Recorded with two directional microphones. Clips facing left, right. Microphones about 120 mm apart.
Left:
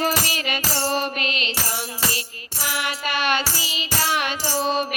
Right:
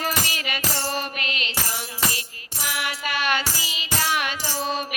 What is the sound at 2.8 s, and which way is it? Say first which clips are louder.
Music: left 2 dB; 25° left (ahead or behind).